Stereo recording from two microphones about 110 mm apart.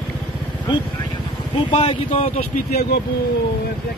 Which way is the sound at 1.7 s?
65° left (ahead or behind).